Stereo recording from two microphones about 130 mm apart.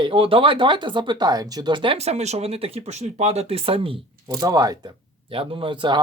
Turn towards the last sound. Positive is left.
turn(degrees=-40)  # may be behind; listen again after turning